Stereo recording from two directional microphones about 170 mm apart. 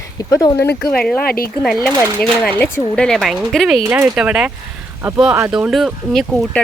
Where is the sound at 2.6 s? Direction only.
10° left (ahead or behind).